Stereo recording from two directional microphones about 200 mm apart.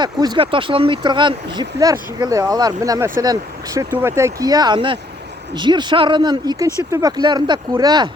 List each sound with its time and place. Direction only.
0.0 s speech: 20° right (ahead or behind)